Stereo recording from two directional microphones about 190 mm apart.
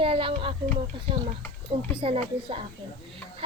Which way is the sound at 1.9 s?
30° right (ahead or behind).